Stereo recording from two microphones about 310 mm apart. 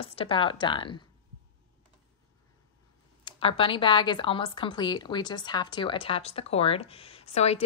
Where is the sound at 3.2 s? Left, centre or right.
Centre.